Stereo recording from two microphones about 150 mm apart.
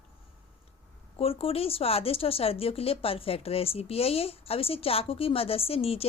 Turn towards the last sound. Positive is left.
turn(degrees=40)  # may be behind; listen again after turning